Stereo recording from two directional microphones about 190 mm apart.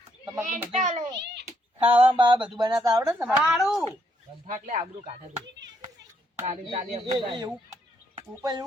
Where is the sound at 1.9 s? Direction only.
30° right (ahead or behind).